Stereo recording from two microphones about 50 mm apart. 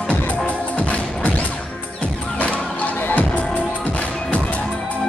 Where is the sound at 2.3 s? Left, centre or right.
Left.